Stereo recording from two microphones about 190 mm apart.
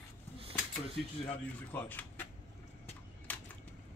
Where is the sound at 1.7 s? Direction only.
10° left (ahead or behind).